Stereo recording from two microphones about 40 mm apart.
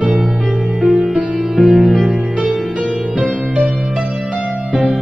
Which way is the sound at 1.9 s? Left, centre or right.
Centre.